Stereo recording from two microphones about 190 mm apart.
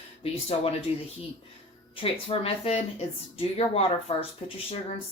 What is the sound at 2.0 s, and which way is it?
Speech, 30° left (ahead or behind).